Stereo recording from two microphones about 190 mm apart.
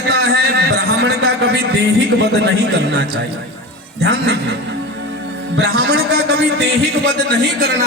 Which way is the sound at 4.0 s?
60° right (ahead or behind).